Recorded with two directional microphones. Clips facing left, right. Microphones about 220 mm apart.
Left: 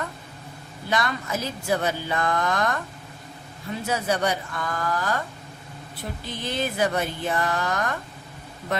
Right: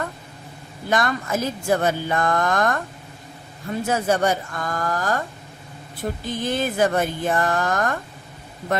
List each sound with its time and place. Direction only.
0.9 s a woman's voice: 50° right (ahead or behind)
3.8 s a woman's voice: 50° right (ahead or behind)